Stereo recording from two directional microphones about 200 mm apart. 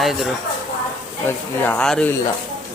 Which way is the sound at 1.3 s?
10° left (ahead or behind).